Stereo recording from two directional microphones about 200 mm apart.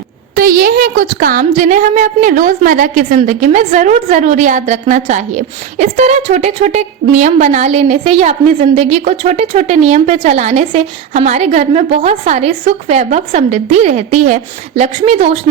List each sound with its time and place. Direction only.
0.3 s a woman's voice: 45° right (ahead or behind); by 15.4 s 30° right (ahead or behind)